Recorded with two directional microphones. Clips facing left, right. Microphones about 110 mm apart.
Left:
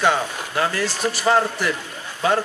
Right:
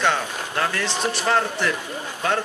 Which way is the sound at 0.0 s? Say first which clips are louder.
Left 2 dB; 5° left (ahead or behind).